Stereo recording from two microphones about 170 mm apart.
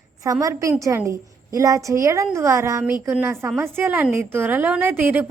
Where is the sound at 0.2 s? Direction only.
20° right (ahead or behind).